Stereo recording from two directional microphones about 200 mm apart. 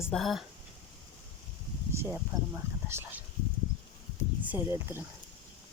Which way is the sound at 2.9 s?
10° right (ahead or behind).